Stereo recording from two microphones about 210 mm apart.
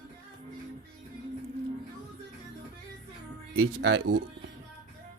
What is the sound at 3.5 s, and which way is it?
Speech, 65° right (ahead or behind).